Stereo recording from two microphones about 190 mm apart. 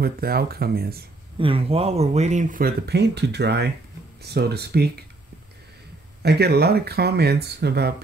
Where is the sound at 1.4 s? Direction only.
30° right (ahead or behind); by 4.8 s 60° right (ahead or behind).